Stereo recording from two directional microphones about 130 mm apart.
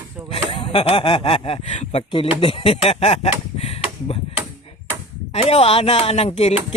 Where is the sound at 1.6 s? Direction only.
65° left (ahead or behind).